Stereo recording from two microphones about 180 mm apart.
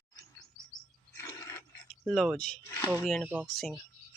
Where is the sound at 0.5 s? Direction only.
20° right (ahead or behind).